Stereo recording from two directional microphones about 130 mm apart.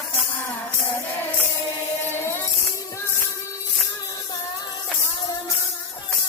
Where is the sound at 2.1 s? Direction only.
20° left (ahead or behind).